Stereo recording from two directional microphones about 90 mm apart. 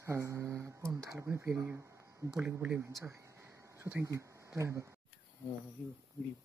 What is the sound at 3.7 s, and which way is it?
Speech, 30° right (ahead or behind).